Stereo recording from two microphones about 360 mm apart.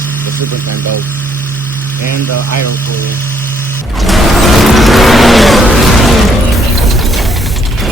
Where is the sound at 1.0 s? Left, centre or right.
Centre.